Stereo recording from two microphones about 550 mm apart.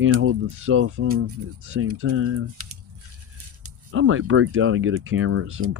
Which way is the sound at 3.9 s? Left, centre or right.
Right.